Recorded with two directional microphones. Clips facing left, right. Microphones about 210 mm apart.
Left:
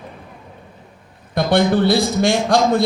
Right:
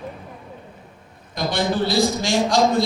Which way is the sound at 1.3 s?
60° left (ahead or behind).